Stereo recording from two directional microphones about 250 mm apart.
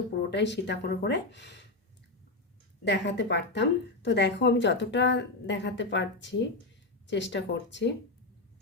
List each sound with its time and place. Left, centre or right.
0.3 s speech: left
2.8 s speech: left